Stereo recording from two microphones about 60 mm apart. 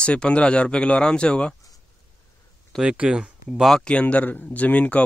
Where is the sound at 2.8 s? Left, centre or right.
Centre.